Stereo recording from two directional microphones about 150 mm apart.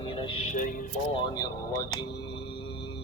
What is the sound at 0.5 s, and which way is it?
Speech, 60° left (ahead or behind).